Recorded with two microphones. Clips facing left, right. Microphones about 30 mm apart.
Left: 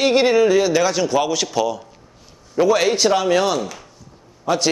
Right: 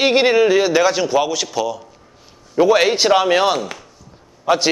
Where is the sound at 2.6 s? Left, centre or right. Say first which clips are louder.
Right 2 dB; centre.